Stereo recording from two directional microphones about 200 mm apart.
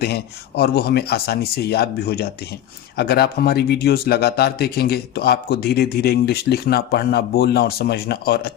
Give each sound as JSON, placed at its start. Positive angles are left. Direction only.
{"t": 0.0, "sound": "speech", "side_deg": 50}